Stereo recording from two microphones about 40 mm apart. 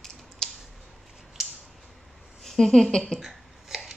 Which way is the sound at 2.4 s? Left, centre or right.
Centre.